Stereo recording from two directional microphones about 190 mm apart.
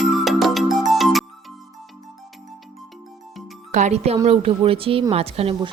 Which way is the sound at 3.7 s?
35° right (ahead or behind).